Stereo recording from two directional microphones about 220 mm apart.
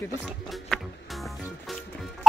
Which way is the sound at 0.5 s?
Centre (ahead or behind).